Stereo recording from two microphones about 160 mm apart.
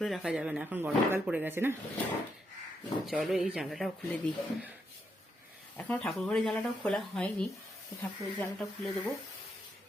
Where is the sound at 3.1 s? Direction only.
Centre (ahead or behind).